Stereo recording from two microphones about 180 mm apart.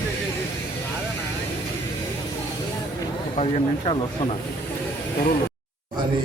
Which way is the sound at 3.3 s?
35° left (ahead or behind).